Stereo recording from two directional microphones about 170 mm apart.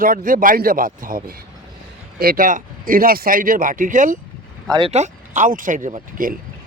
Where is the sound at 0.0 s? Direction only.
55° right (ahead or behind).